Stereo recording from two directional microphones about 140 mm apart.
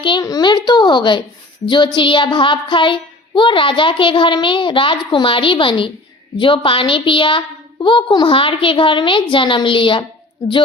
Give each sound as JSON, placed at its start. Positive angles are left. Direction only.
{"t": 0.0, "sound": "speech", "side_deg": 30}